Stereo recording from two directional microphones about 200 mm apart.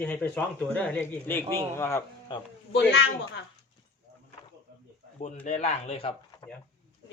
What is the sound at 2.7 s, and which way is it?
Speech, 60° left (ahead or behind).